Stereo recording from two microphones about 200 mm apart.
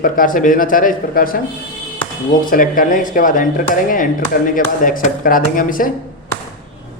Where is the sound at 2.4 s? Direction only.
45° left (ahead or behind).